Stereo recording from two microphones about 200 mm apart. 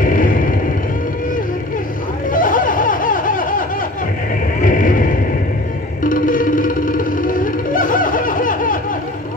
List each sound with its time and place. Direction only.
0.0 s vehicle: 40° left (ahead or behind)
2.3 s a sound: 40° left (ahead or behind)
6.0 s music: 40° left (ahead or behind)